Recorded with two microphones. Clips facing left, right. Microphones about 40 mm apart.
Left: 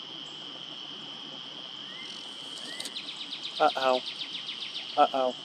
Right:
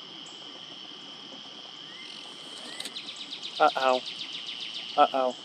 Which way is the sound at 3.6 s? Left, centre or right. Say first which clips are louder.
Right 2 dB; centre.